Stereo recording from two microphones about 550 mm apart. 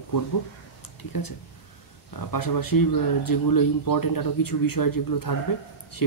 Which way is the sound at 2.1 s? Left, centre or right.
Left.